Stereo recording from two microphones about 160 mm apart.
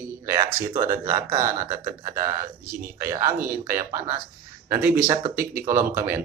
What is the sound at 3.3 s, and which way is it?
Speech, 65° right (ahead or behind).